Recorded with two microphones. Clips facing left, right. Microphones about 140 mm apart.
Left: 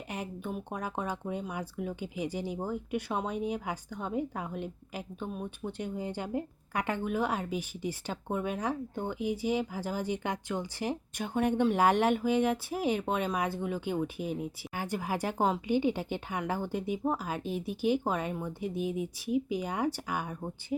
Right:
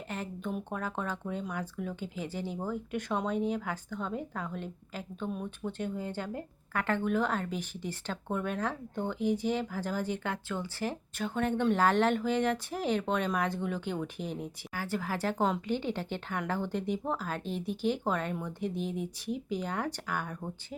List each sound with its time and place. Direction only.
0.1 s speech: 15° left (ahead or behind)